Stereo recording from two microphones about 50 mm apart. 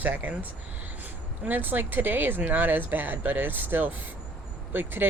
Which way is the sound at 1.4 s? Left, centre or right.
Right.